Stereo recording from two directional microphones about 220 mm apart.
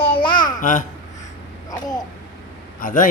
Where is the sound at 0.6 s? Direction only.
35° left (ahead or behind).